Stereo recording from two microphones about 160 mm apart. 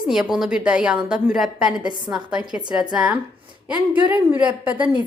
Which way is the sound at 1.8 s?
30° right (ahead or behind).